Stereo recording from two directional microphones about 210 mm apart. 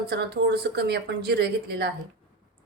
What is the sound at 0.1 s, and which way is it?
A woman's voice, 50° right (ahead or behind).